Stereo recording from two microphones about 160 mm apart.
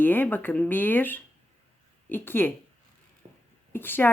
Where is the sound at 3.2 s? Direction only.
40° right (ahead or behind).